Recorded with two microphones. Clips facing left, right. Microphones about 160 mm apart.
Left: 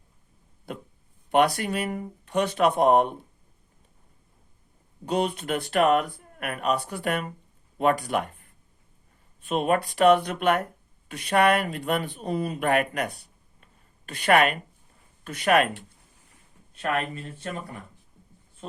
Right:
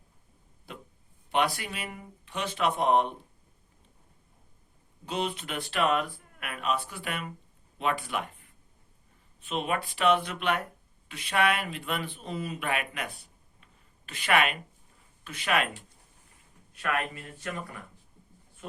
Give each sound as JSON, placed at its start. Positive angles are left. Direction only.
{"t": 1.3, "sound": "speech", "side_deg": 45}
{"t": 5.0, "sound": "speech", "side_deg": 45}
{"t": 9.5, "sound": "speech", "side_deg": 45}
{"t": 13.6, "sound": "a sound", "side_deg": 45}
{"t": 15.2, "sound": "speech", "side_deg": 50}
{"t": 16.7, "sound": "speech", "side_deg": 30}